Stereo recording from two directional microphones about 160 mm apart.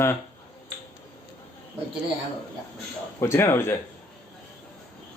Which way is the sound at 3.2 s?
15° left (ahead or behind).